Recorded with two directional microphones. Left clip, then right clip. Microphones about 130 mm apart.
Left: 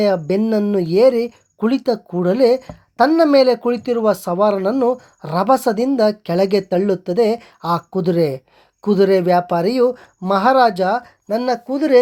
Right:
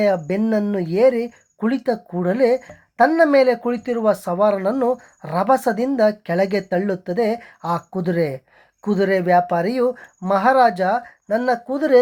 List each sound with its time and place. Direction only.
0.0 s speech: 40° left (ahead or behind)
4.7 s speech: 25° left (ahead or behind)
5.2 s speech: 40° left (ahead or behind)